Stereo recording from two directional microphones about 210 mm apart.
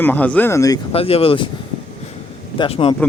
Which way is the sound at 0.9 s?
25° left (ahead or behind).